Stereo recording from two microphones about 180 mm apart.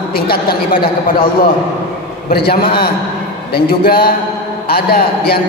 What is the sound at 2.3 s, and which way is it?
A man's voice, 60° left (ahead or behind).